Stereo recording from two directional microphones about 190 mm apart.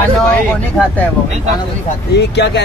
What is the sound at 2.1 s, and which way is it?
Speech, 65° left (ahead or behind).